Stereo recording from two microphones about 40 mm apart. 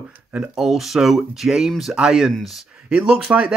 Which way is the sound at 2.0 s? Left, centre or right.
Centre.